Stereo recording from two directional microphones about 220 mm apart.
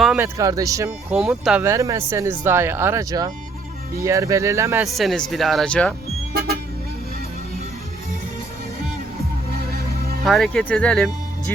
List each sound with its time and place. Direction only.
0.0 s a sound: centre (ahead or behind)
0.3 s speech: 15° right (ahead or behind)
1.1 s speech: centre (ahead or behind)
1.6 s speech: 15° right (ahead or behind)
4.8 s speech: centre (ahead or behind)
6.3 s vehicle: 45° right (ahead or behind)
9.5 s music: 45° right (ahead or behind)
10.2 s speech: centre (ahead or behind)